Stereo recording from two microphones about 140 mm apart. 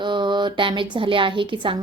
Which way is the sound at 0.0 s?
35° right (ahead or behind).